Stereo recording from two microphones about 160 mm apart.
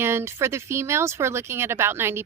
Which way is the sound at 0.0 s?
15° right (ahead or behind).